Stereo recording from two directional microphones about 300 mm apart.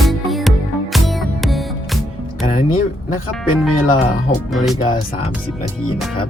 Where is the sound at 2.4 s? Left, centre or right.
Left.